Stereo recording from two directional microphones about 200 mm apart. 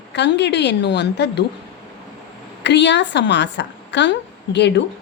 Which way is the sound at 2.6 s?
60° left (ahead or behind).